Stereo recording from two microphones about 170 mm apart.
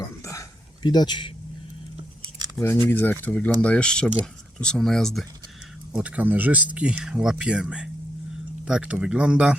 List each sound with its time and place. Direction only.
0.2 s a sound: 20° left (ahead or behind)
2.6 s speech: 15° left (ahead or behind)
5.9 s speech: 10° right (ahead or behind)